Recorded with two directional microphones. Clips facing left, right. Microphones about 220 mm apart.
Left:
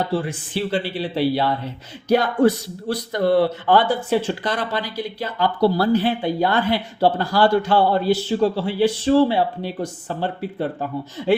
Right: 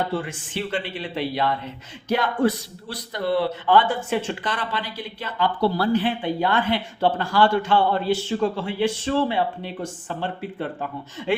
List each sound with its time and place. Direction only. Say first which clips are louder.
0.1 s a man's voice: left 4 dB; 35° left (ahead or behind)